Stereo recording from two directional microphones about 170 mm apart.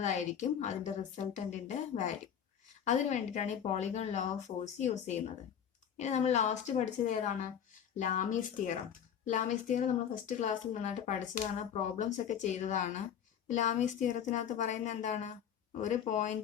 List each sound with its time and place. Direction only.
0.0 s speech: 45° left (ahead or behind)